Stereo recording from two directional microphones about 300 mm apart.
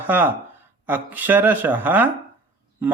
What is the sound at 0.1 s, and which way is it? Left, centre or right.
Speech, centre.